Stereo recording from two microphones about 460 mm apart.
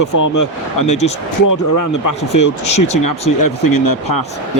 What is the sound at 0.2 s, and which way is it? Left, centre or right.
Speech, left.